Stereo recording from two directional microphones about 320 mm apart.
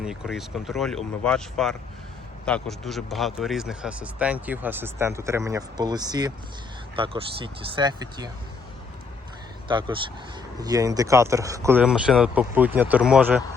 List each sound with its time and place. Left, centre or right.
0.0 s a man's voice: centre
9.6 s a man's voice: centre